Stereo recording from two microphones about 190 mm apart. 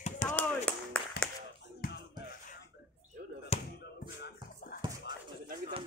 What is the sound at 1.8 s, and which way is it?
Music, 50° left (ahead or behind).